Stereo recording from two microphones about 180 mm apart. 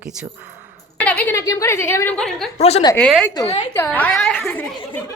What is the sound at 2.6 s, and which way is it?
Speech, 35° left (ahead or behind).